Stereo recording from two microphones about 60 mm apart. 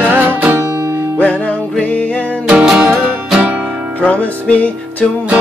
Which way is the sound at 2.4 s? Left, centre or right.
Centre.